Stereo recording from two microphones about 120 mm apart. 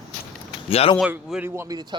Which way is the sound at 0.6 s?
55° left (ahead or behind).